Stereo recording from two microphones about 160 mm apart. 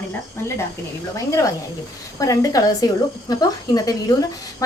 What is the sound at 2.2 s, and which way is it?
Speech, 20° left (ahead or behind).